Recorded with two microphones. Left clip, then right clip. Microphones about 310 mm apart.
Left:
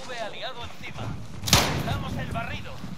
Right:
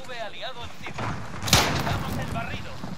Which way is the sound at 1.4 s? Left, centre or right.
Centre.